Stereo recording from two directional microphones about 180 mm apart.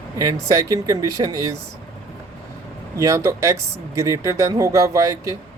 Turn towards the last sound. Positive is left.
turn(degrees=-20)  # may be behind; listen again after turning